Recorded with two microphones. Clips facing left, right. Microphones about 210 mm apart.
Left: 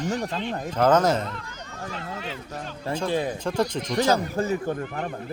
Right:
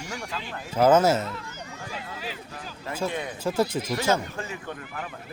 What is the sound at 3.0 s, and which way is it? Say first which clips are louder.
Speech: left 6 dB; 30° left (ahead or behind).